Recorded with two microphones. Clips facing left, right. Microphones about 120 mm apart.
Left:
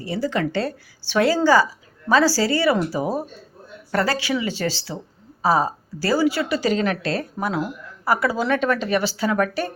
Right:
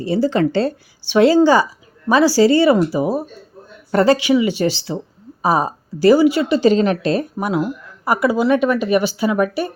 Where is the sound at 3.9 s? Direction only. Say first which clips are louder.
Right 8 dB; 25° right (ahead or behind).